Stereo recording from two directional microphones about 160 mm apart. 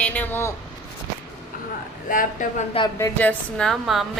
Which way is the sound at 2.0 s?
55° left (ahead or behind).